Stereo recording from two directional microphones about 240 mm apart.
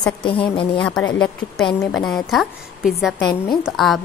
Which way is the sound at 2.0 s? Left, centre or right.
Centre.